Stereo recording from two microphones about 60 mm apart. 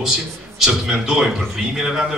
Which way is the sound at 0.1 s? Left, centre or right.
Centre.